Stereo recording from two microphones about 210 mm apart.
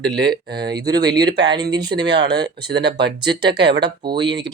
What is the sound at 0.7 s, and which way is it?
Speech, 20° right (ahead or behind).